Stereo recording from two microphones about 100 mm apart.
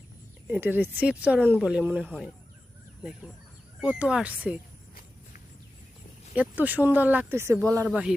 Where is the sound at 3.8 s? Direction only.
10° right (ahead or behind).